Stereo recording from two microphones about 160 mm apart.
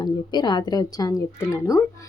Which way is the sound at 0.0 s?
25° left (ahead or behind).